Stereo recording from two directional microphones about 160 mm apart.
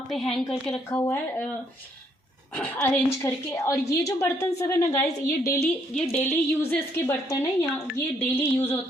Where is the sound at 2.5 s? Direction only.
10° left (ahead or behind).